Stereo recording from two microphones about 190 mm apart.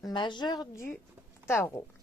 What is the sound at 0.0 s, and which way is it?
A woman's voice, 25° left (ahead or behind).